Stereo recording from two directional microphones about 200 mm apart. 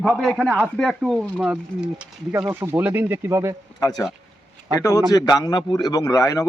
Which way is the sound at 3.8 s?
20° left (ahead or behind).